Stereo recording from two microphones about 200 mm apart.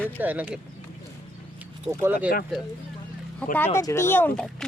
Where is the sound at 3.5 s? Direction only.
10° left (ahead or behind).